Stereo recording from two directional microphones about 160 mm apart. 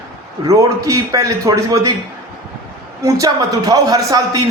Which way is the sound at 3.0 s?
25° right (ahead or behind).